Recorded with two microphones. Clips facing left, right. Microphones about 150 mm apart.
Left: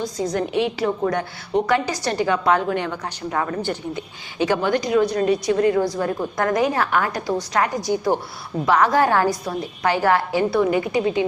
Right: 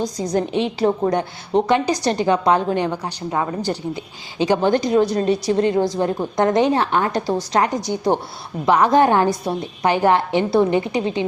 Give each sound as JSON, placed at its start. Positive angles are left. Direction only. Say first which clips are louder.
{"t": 0.3, "sound": "a woman's voice", "louder": "right 1 dB", "side_deg": -25}
{"t": 3.6, "sound": "a woman's voice", "louder": "right 2 dB", "side_deg": -35}